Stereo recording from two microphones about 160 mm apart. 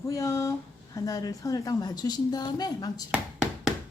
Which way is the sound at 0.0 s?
20° left (ahead or behind).